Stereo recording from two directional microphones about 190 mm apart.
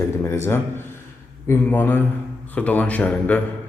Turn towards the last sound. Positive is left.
turn(degrees=10)  # may be behind; listen again after turning